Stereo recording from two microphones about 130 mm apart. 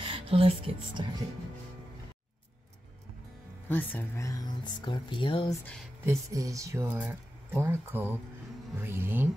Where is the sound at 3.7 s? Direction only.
15° left (ahead or behind).